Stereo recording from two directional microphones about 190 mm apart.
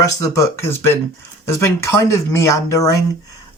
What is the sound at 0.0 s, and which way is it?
Speech, 15° left (ahead or behind).